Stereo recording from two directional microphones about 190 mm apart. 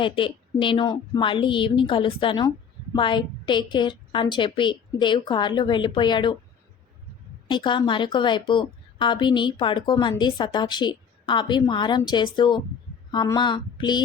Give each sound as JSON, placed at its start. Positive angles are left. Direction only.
{"t": 0.0, "sound": "a woman's voice", "side_deg": 25}
{"t": 7.4, "sound": "a woman's voice", "side_deg": 25}